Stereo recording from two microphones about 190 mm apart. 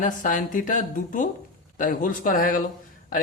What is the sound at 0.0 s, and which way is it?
Speech, 45° left (ahead or behind).